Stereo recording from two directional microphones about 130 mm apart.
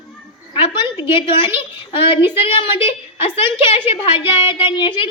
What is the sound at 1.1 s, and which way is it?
A woman's voice, 40° left (ahead or behind).